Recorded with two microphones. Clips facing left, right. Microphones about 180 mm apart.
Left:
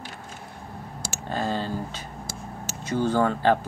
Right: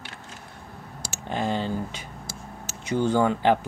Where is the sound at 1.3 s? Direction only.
20° right (ahead or behind).